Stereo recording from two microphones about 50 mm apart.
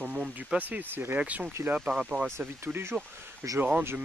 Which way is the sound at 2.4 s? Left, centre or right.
Right.